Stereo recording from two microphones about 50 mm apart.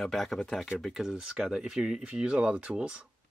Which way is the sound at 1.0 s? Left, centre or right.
Centre.